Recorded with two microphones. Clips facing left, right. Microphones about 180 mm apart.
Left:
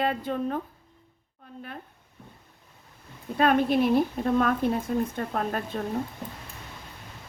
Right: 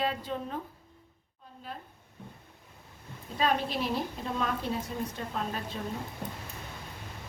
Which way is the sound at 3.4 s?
55° left (ahead or behind).